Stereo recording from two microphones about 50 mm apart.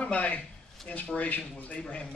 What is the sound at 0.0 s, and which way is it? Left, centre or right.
Speech, left.